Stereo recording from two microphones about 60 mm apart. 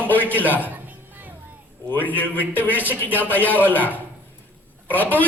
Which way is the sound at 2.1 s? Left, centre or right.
Left.